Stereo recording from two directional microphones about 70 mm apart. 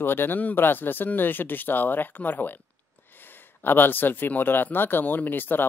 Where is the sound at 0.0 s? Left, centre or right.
Left.